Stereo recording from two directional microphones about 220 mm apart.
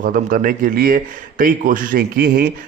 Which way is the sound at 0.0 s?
40° right (ahead or behind).